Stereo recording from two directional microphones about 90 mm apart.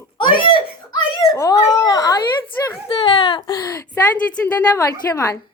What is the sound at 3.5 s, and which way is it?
A child's voice, 45° left (ahead or behind).